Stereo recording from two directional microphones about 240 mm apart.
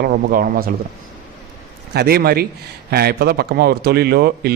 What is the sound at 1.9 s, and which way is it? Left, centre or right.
A man's voice, right.